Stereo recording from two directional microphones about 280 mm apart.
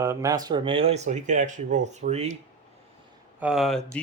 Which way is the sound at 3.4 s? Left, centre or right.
Centre.